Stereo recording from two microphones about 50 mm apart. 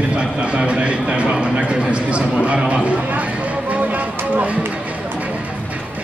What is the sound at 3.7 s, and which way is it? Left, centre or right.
Music, right.